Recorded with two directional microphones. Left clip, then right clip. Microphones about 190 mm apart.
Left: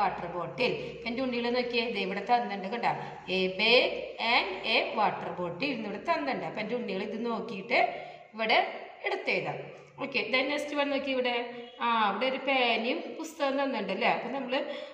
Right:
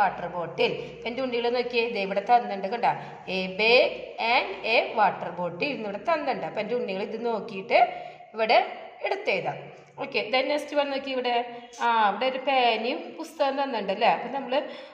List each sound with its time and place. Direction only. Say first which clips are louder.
0.6 s a woman's voice: right 4 dB; 50° right (ahead or behind)